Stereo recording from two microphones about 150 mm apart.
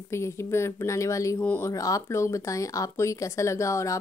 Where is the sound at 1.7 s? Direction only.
20° left (ahead or behind).